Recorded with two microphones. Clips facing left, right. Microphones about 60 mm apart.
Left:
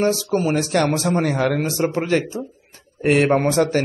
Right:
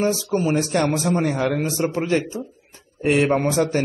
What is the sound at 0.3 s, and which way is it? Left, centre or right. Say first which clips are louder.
Speech: left 1 dB; centre.